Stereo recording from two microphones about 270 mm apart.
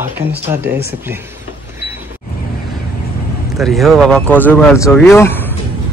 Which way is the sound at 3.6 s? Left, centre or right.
Centre.